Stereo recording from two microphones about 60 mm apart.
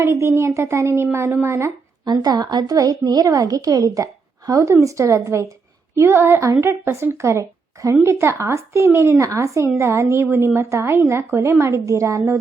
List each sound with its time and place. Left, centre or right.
0.0 s a woman's voice: right
2.2 s a woman's voice: right
6.0 s a woman's voice: right
8.0 s a woman's voice: right